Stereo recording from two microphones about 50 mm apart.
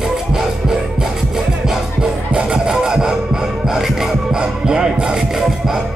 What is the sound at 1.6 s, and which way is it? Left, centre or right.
Music, centre.